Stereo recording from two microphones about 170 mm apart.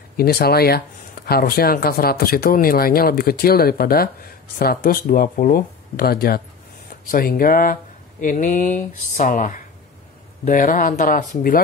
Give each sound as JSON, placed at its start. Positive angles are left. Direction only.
{"t": 0.2, "sound": "speech", "side_deg": 65}